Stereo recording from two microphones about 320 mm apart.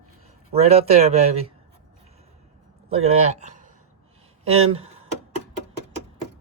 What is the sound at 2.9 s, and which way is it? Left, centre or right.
Speech, centre.